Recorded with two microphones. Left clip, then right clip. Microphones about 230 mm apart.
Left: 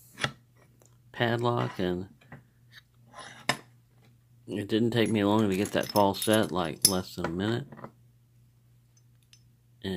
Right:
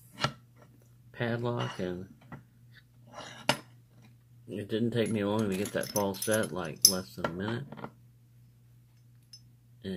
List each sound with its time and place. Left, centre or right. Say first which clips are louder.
1.1 s speech: left 6 dB; left
4.5 s speech: left 5 dB; left